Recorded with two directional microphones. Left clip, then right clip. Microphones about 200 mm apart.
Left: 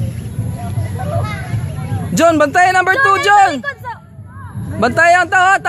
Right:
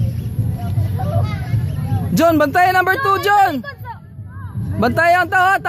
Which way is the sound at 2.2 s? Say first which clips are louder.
Left 3 dB; 10° right (ahead or behind).